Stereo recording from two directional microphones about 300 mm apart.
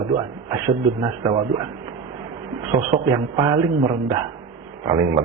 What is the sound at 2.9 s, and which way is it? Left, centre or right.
A man's voice, centre.